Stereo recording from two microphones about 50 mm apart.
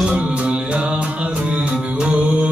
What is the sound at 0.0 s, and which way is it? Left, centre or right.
Music, centre.